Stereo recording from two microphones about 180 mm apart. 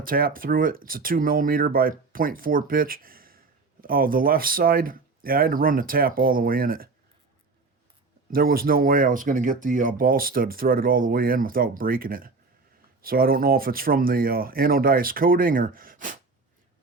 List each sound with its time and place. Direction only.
0.0 s speech: 55° right (ahead or behind)
8.3 s speech: 55° right (ahead or behind)